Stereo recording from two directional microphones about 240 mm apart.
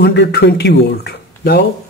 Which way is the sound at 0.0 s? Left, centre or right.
Left.